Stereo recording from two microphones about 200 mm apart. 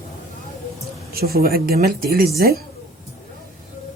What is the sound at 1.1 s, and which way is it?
Speech, 50° right (ahead or behind).